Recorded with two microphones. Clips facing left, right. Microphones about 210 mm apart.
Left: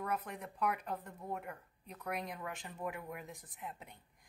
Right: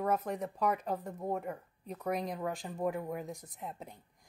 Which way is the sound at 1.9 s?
35° right (ahead or behind).